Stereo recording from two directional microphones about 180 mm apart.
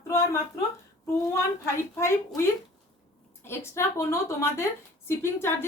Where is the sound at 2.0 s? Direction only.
15° left (ahead or behind).